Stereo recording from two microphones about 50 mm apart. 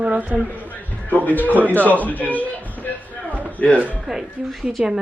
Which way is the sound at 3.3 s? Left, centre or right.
Right.